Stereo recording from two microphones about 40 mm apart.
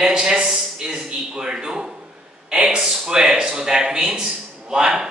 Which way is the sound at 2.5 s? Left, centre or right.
Centre.